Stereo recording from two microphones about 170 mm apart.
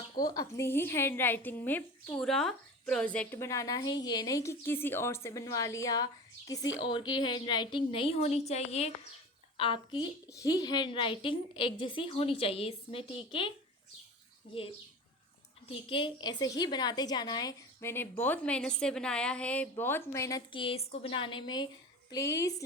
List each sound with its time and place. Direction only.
0.2 s a woman's voice: 20° left (ahead or behind)
15.7 s a woman's voice: 30° left (ahead or behind)
20.5 s a woman's voice: 30° left (ahead or behind)